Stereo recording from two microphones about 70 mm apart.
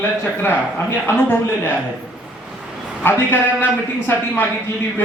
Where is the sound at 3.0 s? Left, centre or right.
Left.